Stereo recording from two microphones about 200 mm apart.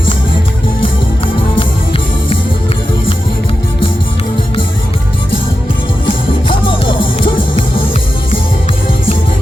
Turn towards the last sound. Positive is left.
turn(degrees=25)  # may be behind; listen again after turning